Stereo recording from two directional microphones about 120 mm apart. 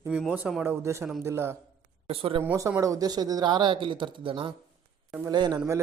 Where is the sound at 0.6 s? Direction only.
20° right (ahead or behind).